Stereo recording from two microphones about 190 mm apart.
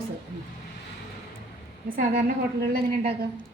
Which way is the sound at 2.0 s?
50° right (ahead or behind).